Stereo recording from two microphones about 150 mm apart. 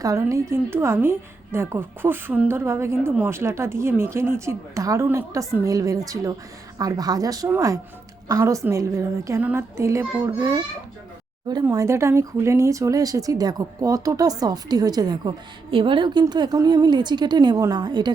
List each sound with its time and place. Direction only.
0.0 s a woman's voice: 20° right (ahead or behind)
11.7 s speech: 20° right (ahead or behind)